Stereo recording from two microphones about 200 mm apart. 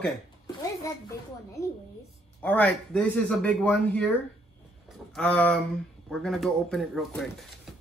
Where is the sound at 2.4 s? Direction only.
5° left (ahead or behind).